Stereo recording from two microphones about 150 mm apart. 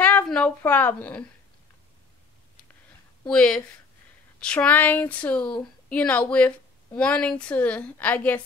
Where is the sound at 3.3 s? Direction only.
5° left (ahead or behind).